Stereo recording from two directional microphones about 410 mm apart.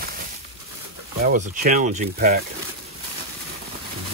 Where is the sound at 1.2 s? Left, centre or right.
Centre.